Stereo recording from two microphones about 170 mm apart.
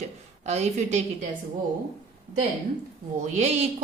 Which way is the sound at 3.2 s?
40° right (ahead or behind).